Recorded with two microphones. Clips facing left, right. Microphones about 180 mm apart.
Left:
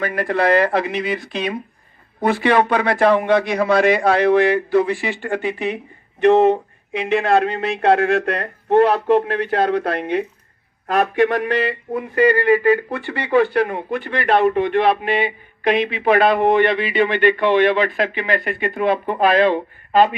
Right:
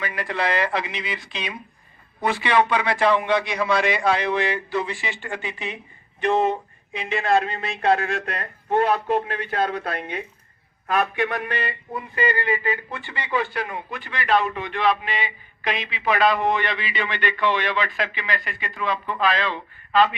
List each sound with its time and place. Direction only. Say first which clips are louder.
0.0 s a man's voice: left 7 dB; 50° left (ahead or behind)